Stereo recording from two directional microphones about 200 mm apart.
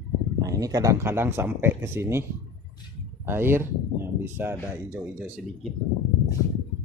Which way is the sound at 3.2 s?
10° right (ahead or behind).